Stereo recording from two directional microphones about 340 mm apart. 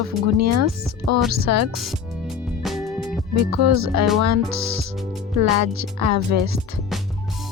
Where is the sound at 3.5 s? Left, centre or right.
Right.